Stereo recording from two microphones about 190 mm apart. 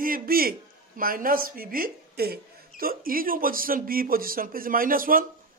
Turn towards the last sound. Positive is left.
turn(degrees=-50)  # may be behind; listen again after turning